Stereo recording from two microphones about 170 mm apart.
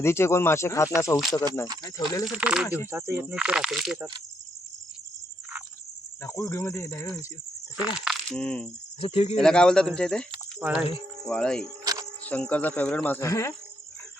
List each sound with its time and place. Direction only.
0.0 s cricket: 15° left (ahead or behind)
2.2 s speech: 5° right (ahead or behind)
2.6 s cricket: 15° left (ahead or behind)
2.9 s speech: 15° right (ahead or behind)
6.2 s cricket: 15° left (ahead or behind)
7.8 s speech: centre (ahead or behind)
9.0 s speech: 35° left (ahead or behind)
9.4 s speech: 5° left (ahead or behind)
10.6 s speech: 10° right (ahead or behind)
11.3 s speech: 5° left (ahead or behind)
11.9 s music: 20° right (ahead or behind)
12.2 s cricket: 10° left (ahead or behind)